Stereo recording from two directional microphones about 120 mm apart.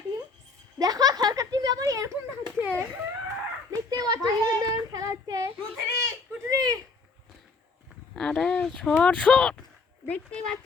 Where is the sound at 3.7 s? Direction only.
30° right (ahead or behind).